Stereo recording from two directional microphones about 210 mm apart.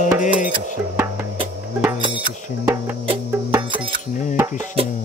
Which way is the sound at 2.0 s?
25° right (ahead or behind).